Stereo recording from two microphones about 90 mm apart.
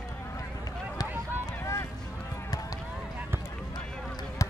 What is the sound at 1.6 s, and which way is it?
Boat, 30° left (ahead or behind).